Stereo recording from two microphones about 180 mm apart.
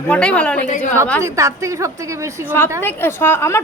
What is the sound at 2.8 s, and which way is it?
Speech, 15° left (ahead or behind).